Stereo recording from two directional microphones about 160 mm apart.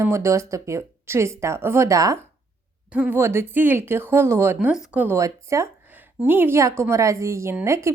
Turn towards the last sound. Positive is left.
turn(degrees=-20)  # may be behind; listen again after turning